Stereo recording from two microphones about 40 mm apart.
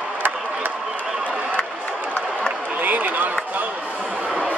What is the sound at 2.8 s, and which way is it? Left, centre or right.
Run, right.